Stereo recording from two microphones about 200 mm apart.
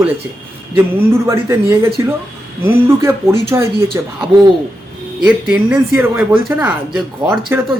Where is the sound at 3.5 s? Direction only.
15° right (ahead or behind).